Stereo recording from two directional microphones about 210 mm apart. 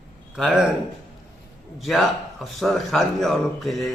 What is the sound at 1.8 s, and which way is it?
A man's voice, centre (ahead or behind).